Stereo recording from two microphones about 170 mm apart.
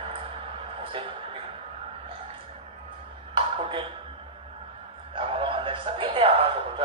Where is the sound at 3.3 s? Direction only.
30° right (ahead or behind).